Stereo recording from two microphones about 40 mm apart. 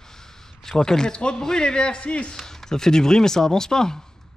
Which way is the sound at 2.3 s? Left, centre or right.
Centre.